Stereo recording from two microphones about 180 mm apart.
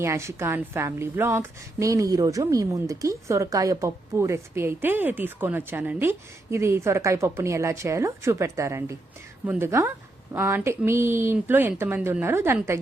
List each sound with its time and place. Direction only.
0.0 s a woman's voice: 15° right (ahead or behind)